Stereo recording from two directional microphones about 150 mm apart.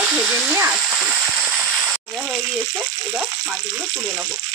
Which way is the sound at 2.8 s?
10° right (ahead or behind).